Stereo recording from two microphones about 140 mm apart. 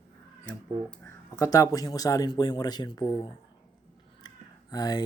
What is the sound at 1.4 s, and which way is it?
Speech, 25° left (ahead or behind).